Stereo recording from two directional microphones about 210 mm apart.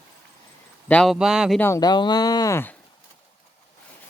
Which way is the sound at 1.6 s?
15° left (ahead or behind).